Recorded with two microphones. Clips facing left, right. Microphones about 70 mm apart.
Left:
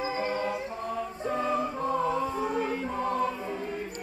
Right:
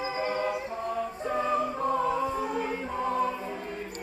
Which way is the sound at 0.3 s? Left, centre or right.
Centre.